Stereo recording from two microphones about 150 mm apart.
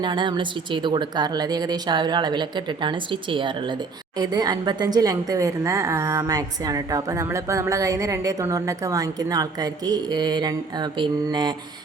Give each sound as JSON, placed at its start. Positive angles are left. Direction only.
{"t": 0.0, "sound": "a woman's voice", "side_deg": -30}